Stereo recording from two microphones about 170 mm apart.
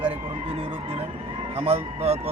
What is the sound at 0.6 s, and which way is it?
A man's voice, 35° right (ahead or behind).